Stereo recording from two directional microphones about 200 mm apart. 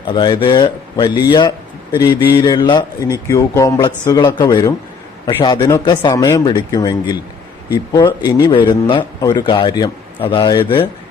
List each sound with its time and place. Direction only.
0.0 s a man's voice: 25° left (ahead or behind)